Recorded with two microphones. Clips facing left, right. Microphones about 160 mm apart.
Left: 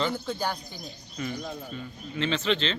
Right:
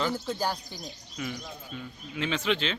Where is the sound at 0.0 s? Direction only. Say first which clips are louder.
Even; 5° right (ahead or behind).